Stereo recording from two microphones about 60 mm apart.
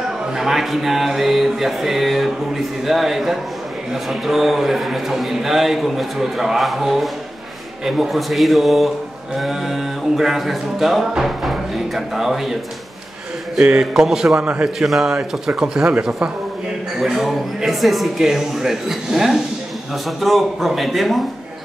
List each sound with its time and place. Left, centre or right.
0.3 s music: centre
13.6 s speech: centre
14.4 s a man's voice: right
14.8 s music: centre
15.1 s speech: centre
17.0 s music: centre